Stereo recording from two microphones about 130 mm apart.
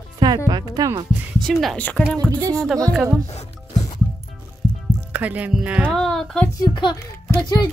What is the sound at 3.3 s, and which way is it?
Music, 55° left (ahead or behind).